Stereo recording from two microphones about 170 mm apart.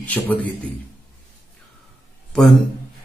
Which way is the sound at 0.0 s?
10° left (ahead or behind).